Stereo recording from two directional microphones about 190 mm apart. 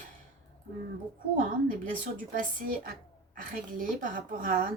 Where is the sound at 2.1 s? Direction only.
45° right (ahead or behind).